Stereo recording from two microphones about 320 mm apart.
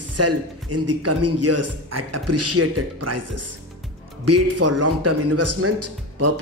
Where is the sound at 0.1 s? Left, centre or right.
Right.